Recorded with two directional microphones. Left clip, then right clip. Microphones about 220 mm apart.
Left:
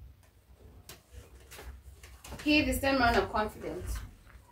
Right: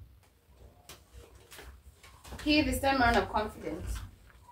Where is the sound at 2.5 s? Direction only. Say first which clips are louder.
Even; 15° left (ahead or behind).